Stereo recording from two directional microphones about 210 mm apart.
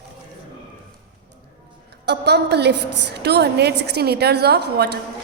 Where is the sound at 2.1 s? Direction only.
55° right (ahead or behind).